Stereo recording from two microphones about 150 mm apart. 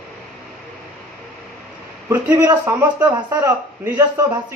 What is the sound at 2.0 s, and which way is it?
A man's voice, 20° right (ahead or behind).